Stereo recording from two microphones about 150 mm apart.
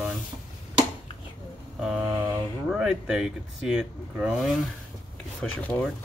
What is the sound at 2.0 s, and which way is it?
Mantra, 15° right (ahead or behind).